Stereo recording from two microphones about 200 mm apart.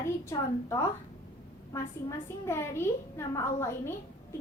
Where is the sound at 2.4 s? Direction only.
15° left (ahead or behind).